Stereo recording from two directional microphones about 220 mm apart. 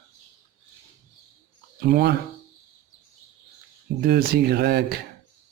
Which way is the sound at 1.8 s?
45° right (ahead or behind).